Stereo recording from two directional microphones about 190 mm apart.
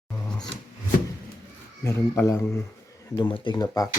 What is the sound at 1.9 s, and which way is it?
Speech, 15° left (ahead or behind).